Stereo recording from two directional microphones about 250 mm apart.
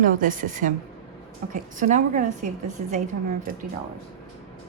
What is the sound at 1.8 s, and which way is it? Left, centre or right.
Speech, right.